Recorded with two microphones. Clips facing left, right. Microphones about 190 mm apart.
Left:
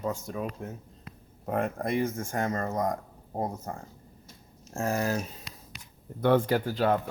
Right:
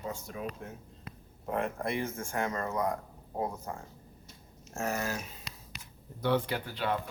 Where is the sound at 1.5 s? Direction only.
45° left (ahead or behind).